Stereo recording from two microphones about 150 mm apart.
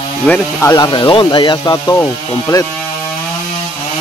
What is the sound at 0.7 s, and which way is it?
Speech, 30° left (ahead or behind).